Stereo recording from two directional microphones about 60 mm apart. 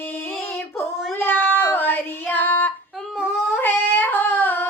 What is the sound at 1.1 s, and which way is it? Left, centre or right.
Child singing, left.